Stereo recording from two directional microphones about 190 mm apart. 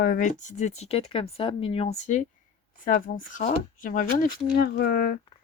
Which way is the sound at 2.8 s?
50° left (ahead or behind).